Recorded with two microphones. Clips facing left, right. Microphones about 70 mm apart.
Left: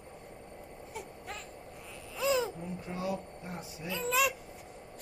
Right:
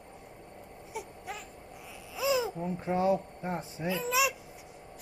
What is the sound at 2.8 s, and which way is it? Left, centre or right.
Speech, right.